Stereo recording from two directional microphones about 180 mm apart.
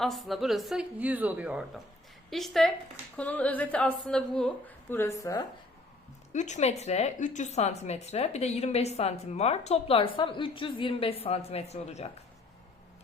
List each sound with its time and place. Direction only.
0.0 s a woman's voice: centre (ahead or behind); by 5.5 s 20° left (ahead or behind)
6.3 s a woman's voice: 40° left (ahead or behind)